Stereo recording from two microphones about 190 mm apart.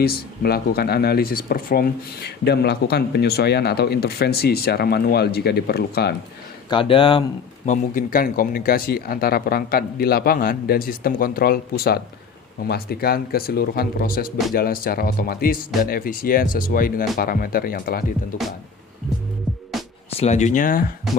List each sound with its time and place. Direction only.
0.0 s speech: 55° left (ahead or behind)
6.7 s speech: 25° left (ahead or behind)
7.7 s speech: 45° left (ahead or behind)
19.7 s music: centre (ahead or behind)
20.1 s speech: 35° left (ahead or behind)